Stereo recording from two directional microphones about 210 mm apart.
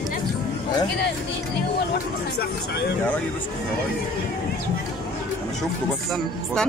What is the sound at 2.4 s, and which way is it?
Speech, 50° left (ahead or behind).